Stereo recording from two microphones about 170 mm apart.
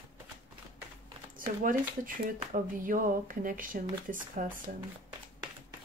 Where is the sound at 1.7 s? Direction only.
55° right (ahead or behind).